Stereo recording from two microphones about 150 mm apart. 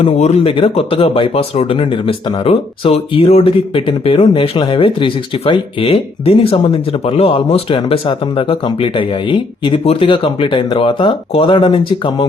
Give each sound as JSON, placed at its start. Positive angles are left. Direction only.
{"t": 0.0, "sound": "speech", "side_deg": 45}